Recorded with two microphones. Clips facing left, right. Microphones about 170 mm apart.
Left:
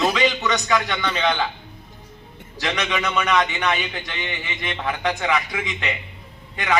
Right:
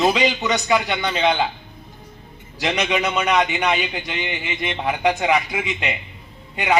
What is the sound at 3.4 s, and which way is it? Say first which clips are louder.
A man's voice: right 2 dB; 15° right (ahead or behind).